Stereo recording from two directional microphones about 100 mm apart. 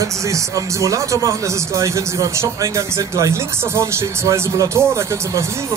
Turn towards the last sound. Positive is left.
turn(degrees=-30)  # may be behind; listen again after turning